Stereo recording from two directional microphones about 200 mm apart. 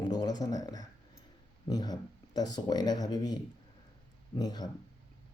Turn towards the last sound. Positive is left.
turn(degrees=20)  # may be behind; listen again after turning